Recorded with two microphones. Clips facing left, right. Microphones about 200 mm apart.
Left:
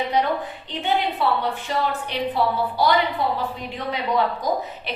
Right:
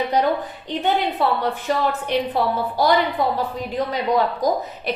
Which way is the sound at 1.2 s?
45° right (ahead or behind).